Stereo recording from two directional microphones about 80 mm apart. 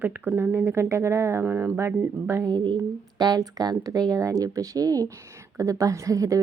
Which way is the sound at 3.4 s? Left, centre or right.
Right.